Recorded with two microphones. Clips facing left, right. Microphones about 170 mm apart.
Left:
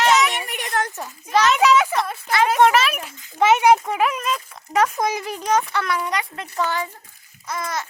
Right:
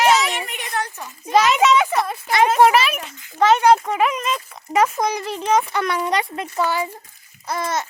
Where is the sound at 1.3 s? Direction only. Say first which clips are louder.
Right 2 dB; 15° right (ahead or behind).